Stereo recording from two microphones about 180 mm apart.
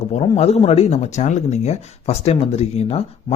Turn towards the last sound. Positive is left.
turn(degrees=35)  # may be behind; listen again after turning